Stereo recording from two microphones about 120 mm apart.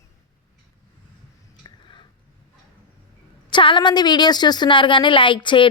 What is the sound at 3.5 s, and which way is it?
A woman's voice, 40° left (ahead or behind).